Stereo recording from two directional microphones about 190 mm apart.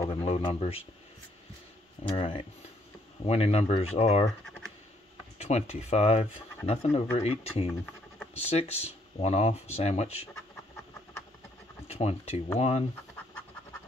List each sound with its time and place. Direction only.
0.1 s speech: 30° left (ahead or behind)
2.0 s speech: 30° left (ahead or behind)
5.4 s speech: 35° left (ahead or behind)
11.9 s speech: 35° left (ahead or behind)